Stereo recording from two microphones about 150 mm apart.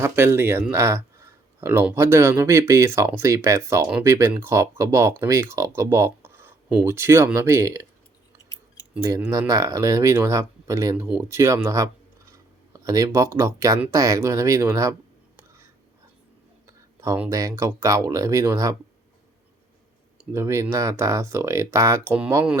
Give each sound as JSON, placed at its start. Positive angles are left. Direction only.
{"t": 0.0, "sound": "speech", "side_deg": -15}
{"t": 9.5, "sound": "speech", "side_deg": -20}
{"t": 16.6, "sound": "a sound", "side_deg": -20}
{"t": 17.2, "sound": "speech", "side_deg": -20}
{"t": 20.3, "sound": "speech", "side_deg": -20}